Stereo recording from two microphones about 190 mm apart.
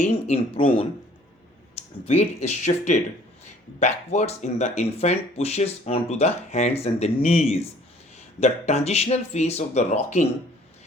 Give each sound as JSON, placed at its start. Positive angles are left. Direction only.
{"t": 0.0, "sound": "speech", "side_deg": 35}